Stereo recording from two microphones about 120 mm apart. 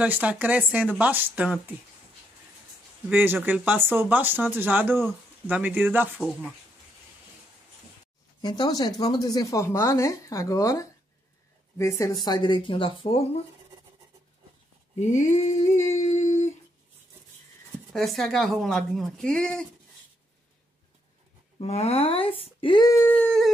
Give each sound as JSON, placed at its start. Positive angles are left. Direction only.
{"t": 0.0, "sound": "speech", "side_deg": -10}
{"t": 3.1, "sound": "speech", "side_deg": -15}
{"t": 8.4, "sound": "speech", "side_deg": 35}
{"t": 15.0, "sound": "a sound", "side_deg": 80}
{"t": 17.9, "sound": "speech", "side_deg": 0}
{"t": 21.5, "sound": "speech", "side_deg": 60}
{"t": 22.8, "sound": "wail", "side_deg": 20}